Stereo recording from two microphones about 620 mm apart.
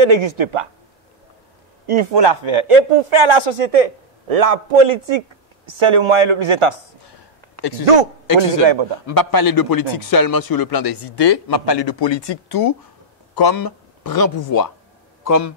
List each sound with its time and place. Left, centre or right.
0.0 s speech: right
1.9 s a man's voice: right
9.0 s speech: left